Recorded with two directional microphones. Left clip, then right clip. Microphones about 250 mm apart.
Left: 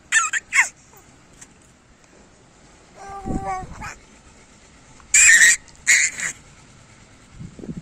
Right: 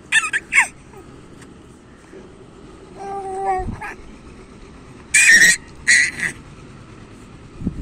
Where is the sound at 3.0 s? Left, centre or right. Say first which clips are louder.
Right 5 dB; centre.